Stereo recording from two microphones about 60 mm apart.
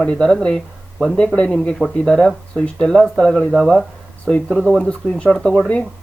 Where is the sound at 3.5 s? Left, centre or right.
Centre.